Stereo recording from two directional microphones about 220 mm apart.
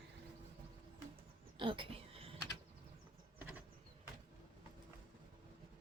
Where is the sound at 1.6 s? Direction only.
25° right (ahead or behind).